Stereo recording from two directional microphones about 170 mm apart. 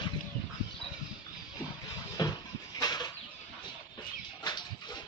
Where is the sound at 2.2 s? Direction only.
25° left (ahead or behind).